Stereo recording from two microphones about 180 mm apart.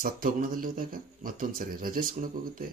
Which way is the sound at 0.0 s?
50° right (ahead or behind).